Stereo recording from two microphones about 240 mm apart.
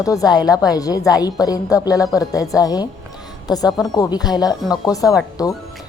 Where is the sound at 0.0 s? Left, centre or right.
Centre.